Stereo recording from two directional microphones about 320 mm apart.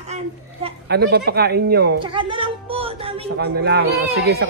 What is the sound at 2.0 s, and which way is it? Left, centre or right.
Music, centre.